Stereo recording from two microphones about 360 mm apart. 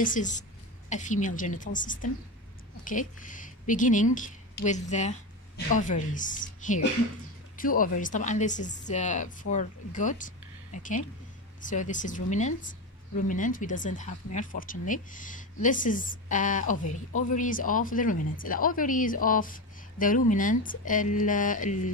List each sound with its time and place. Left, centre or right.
0.0 s a woman's voice: left